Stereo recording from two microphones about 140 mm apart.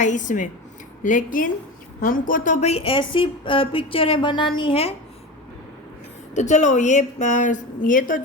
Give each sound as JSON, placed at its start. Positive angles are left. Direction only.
{"t": 0.0, "sound": "a woman's voice", "side_deg": 65}
{"t": 6.3, "sound": "a woman's voice", "side_deg": 60}